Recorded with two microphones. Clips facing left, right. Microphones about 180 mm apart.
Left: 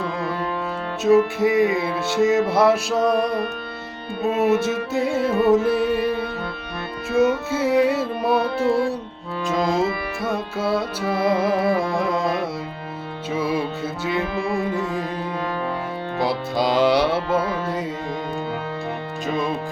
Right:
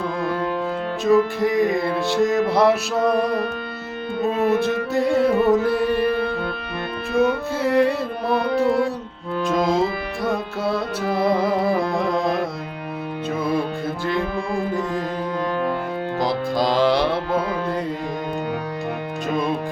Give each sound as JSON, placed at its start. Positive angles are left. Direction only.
{"t": 1.0, "sound": "music", "side_deg": 5}
{"t": 4.4, "sound": "music", "side_deg": 5}
{"t": 5.9, "sound": "music", "side_deg": -60}
{"t": 7.2, "sound": "music", "side_deg": 5}
{"t": 11.6, "sound": "carnatic music", "side_deg": 0}
{"t": 13.3, "sound": "music", "side_deg": 5}
{"t": 16.2, "sound": "music", "side_deg": 5}
{"t": 19.3, "sound": "music", "side_deg": 0}